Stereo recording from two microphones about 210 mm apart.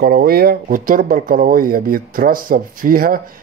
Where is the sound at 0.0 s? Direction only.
45° right (ahead or behind).